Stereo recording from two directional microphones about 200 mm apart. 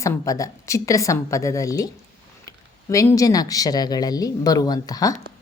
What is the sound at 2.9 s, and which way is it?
Speech, 15° left (ahead or behind).